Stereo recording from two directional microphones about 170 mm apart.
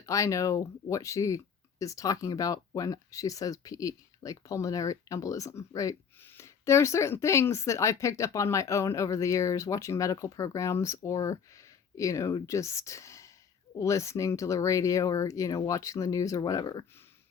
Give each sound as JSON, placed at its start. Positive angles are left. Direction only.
{"t": 0.0, "sound": "speech", "side_deg": 20}